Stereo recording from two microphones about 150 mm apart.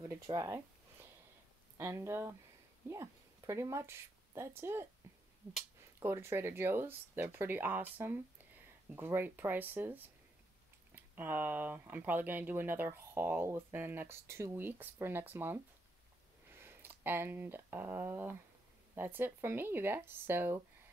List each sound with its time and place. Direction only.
0.1 s speech: 20° right (ahead or behind)
1.8 s speech: 15° right (ahead or behind)
5.0 s a sound: 20° right (ahead or behind)
5.9 s speech: 15° right (ahead or behind)